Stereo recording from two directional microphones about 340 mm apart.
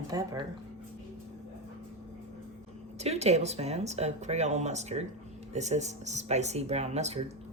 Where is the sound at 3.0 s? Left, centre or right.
Centre.